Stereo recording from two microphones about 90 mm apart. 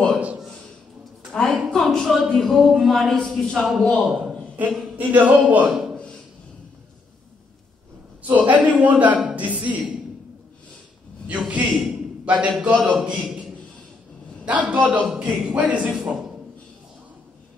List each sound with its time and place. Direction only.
1.3 s a woman's voice: 10° left (ahead or behind)
4.9 s a man's voice: 20° right (ahead or behind)
5.9 s a sound: 10° left (ahead or behind)
8.5 s a man's voice: 15° right (ahead or behind)
11.2 s a man's voice: 15° right (ahead or behind)
14.4 s a man's voice: 15° right (ahead or behind)